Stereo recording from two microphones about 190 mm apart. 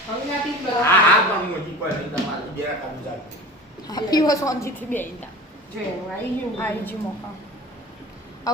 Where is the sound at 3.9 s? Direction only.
20° left (ahead or behind).